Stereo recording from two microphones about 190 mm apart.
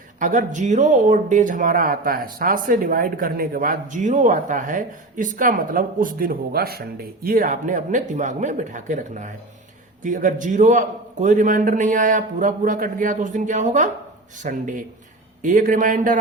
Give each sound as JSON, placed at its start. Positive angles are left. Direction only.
{"t": 0.2, "sound": "a man's voice", "side_deg": -45}